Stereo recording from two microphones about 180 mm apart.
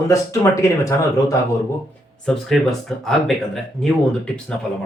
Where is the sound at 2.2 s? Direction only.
5° left (ahead or behind).